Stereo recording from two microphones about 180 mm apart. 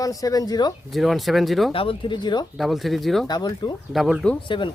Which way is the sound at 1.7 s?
30° left (ahead or behind).